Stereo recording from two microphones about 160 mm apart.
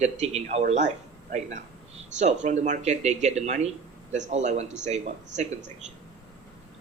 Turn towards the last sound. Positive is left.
turn(degrees=-45)  # may be behind; listen again after turning